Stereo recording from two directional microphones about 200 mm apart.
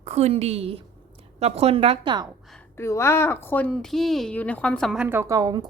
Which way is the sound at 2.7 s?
15° left (ahead or behind).